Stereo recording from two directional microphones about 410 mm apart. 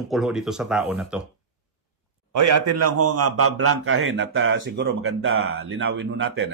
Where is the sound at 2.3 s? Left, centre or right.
Right.